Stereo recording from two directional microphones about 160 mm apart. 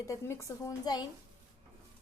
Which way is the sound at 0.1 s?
20° left (ahead or behind).